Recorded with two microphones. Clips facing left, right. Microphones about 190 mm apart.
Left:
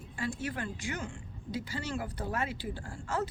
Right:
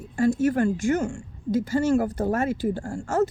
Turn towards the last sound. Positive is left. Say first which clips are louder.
# right 11 dB
turn(degrees=-45)  # may be behind; listen again after turning